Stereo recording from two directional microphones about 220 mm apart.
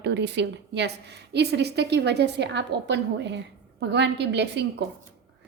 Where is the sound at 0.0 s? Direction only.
50° right (ahead or behind).